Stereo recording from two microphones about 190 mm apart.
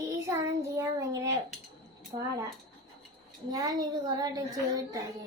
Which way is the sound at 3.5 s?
20° right (ahead or behind).